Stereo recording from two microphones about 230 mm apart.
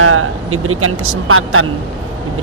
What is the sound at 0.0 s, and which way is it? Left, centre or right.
Speech, right.